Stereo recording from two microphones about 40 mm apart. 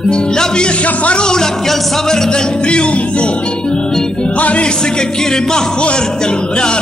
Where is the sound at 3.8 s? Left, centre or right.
Centre.